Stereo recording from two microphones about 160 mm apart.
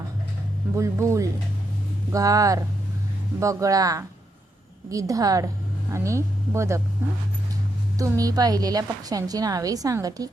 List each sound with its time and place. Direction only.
0.8 s a woman's voice: 20° right (ahead or behind)
7.9 s a woman's voice: 20° right (ahead or behind)